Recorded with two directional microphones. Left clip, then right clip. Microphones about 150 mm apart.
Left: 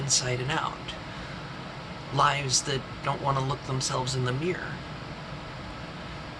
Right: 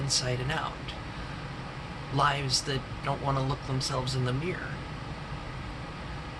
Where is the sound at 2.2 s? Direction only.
10° left (ahead or behind).